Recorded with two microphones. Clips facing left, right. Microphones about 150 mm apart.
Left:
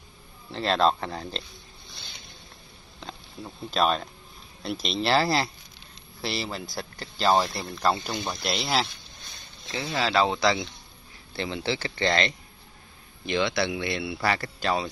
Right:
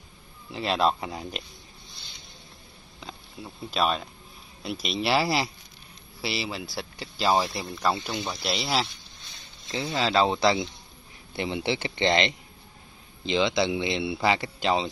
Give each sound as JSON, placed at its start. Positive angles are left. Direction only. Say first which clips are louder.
{"t": 0.5, "sound": "speech", "louder": "left 2 dB", "side_deg": -10}
{"t": 3.4, "sound": "speech", "louder": "left 2 dB", "side_deg": -10}
{"t": 9.7, "sound": "speech", "louder": "right 1 dB", "side_deg": -20}